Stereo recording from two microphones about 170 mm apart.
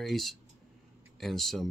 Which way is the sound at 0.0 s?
Centre (ahead or behind).